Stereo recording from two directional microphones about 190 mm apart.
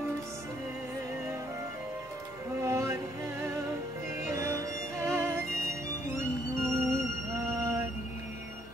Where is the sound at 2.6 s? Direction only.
15° right (ahead or behind).